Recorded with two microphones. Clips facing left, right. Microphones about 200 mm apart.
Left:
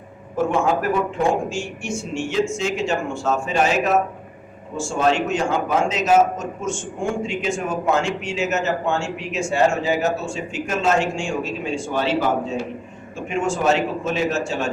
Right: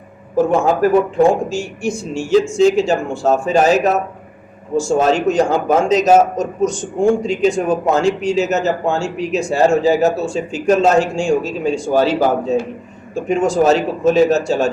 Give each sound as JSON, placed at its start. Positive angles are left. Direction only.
{"t": 0.3, "sound": "a man's voice", "side_deg": -35}
{"t": 4.8, "sound": "a man's voice", "side_deg": -40}